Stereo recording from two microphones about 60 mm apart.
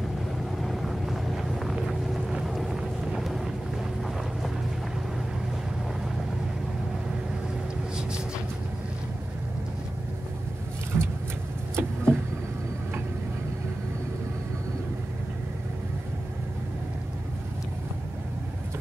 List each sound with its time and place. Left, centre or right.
0.6 s vehicle: centre
10.9 s vehicle: right